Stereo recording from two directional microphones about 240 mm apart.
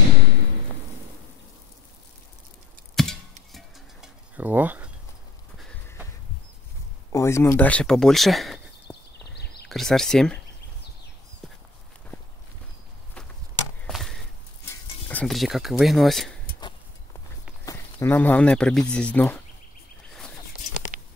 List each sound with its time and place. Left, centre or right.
3.0 s music: centre
3.5 s a sound: centre
5.6 s a sound: centre
7.1 s speech: centre
8.9 s horse: centre
9.3 s a sound: left
9.7 s speech: centre
13.8 s chop: centre
15.0 s speech: centre
17.6 s speech: centre